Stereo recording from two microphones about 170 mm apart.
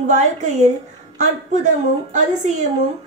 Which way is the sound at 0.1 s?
45° right (ahead or behind).